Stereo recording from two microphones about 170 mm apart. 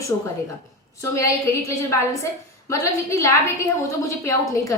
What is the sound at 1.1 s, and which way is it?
A woman's voice, 15° left (ahead or behind).